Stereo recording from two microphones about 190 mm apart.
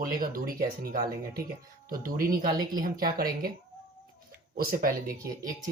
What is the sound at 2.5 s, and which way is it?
Speech, 20° right (ahead or behind).